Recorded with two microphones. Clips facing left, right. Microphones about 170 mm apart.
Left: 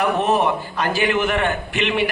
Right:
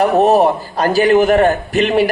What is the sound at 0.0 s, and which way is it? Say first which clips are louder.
A man's voice: right 7 dB; 40° right (ahead or behind).